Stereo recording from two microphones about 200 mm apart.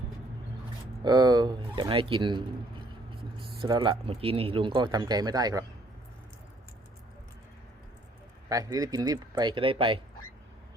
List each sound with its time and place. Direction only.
1.0 s speech: 20° right (ahead or behind)
3.6 s speech: 25° right (ahead or behind)
8.4 s speech: 20° right (ahead or behind)